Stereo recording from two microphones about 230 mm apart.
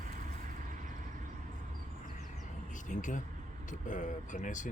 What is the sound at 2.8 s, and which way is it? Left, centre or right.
Speech, left.